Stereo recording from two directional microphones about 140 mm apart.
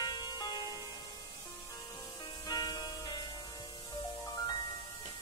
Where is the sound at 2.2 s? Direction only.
30° left (ahead or behind).